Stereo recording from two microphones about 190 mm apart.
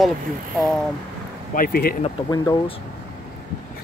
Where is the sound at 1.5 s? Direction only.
50° left (ahead or behind).